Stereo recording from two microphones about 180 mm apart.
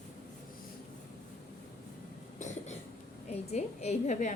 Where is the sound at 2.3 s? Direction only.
40° left (ahead or behind).